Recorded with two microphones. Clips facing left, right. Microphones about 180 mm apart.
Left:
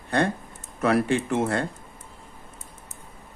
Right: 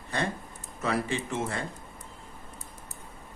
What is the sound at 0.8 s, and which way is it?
Speech, 60° left (ahead or behind).